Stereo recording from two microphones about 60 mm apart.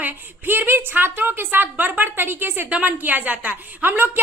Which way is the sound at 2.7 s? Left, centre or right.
Right.